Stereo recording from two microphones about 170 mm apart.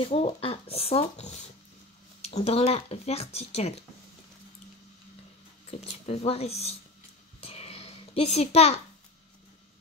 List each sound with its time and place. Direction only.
0.0 s speech: 35° left (ahead or behind)
5.7 s speech: 35° left (ahead or behind)
7.3 s a sound: 35° left (ahead or behind)